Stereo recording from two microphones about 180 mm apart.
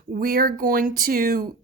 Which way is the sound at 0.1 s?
50° right (ahead or behind).